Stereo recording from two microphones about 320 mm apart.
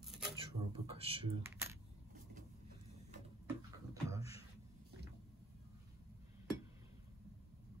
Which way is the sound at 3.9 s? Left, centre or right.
Centre.